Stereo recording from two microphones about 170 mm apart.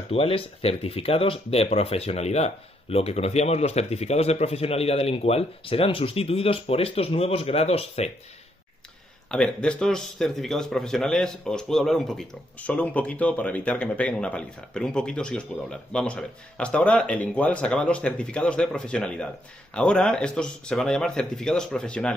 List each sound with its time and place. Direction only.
0.1 s speech: 35° left (ahead or behind)
9.3 s a man's voice: 5° left (ahead or behind)